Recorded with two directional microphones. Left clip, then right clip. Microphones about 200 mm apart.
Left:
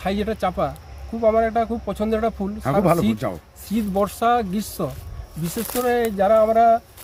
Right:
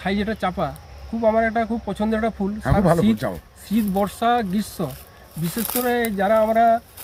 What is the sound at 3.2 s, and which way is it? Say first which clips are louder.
Speech: even; centre (ahead or behind).